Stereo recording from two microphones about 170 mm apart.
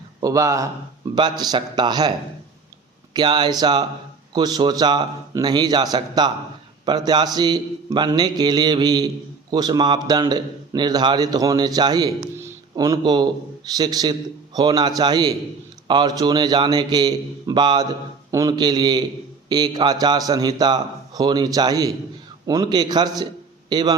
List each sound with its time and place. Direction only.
0.2 s a man's voice: 20° right (ahead or behind)